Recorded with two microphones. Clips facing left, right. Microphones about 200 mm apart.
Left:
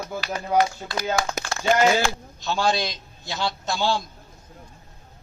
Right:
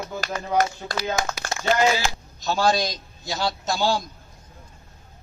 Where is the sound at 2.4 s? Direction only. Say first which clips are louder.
Right 2 dB; 40° right (ahead or behind).